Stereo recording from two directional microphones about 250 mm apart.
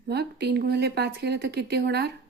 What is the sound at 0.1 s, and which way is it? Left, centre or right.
Speech, right.